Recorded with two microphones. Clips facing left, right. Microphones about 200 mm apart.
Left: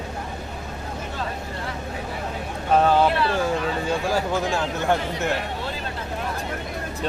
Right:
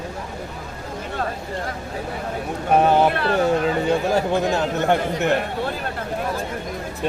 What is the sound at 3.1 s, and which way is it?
Speech, 55° right (ahead or behind).